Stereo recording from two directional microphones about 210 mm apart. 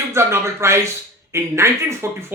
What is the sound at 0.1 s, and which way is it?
Speech, 15° right (ahead or behind).